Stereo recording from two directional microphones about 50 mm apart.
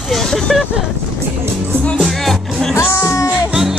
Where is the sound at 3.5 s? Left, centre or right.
Centre.